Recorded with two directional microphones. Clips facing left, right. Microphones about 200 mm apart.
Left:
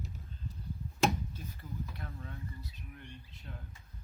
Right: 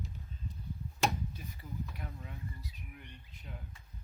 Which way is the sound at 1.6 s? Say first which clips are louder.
Right 1 dB; 15° right (ahead or behind).